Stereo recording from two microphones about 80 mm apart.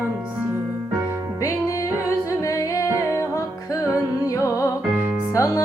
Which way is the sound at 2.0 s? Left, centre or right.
Left.